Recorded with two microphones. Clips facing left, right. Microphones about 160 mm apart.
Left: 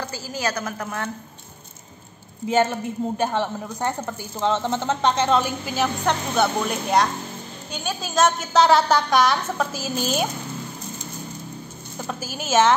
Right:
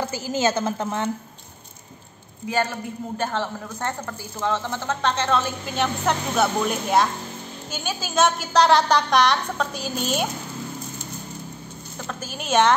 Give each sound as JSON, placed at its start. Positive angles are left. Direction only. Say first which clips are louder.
{"t": 0.1, "sound": "a woman's voice", "louder": "right 5 dB", "side_deg": -20}
{"t": 2.4, "sound": "a woman's voice", "louder": "left 4 dB", "side_deg": 25}
{"t": 5.8, "sound": "a woman's voice", "louder": "even", "side_deg": 0}
{"t": 12.0, "sound": "a woman's voice", "louder": "left 2 dB", "side_deg": 10}